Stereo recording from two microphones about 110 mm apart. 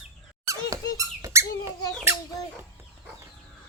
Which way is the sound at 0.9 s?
30° right (ahead or behind).